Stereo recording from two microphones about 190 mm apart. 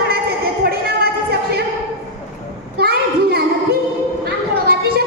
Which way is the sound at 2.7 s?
55° right (ahead or behind).